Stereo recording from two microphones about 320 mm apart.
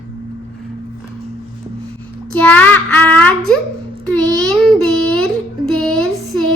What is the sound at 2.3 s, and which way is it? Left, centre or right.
A child's voice, centre.